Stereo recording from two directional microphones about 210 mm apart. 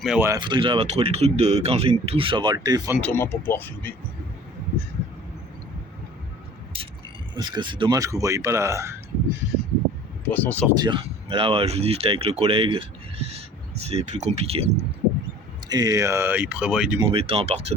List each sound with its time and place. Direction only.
0.0 s speech: 5° right (ahead or behind)
0.3 s speech: 20° right (ahead or behind)
3.0 s speech: 10° left (ahead or behind)
6.7 s mechanisms: 25° right (ahead or behind)
7.3 s speech: 20° right (ahead or behind)
10.2 s speech: 10° left (ahead or behind)
10.7 s speech: 20° right (ahead or behind)
15.7 s speech: 15° right (ahead or behind)
17.0 s speech: 25° right (ahead or behind)